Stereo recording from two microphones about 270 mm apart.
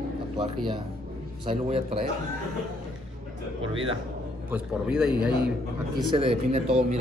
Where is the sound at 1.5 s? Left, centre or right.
Centre.